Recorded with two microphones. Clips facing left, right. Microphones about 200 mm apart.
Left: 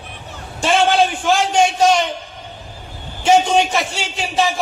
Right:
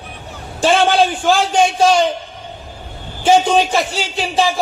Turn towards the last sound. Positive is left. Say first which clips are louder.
# right 2 dB
turn(degrees=-35)  # may be behind; listen again after turning